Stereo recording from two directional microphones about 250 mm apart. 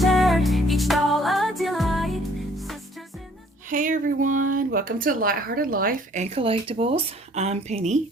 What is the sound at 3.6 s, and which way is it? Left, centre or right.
Speech, right.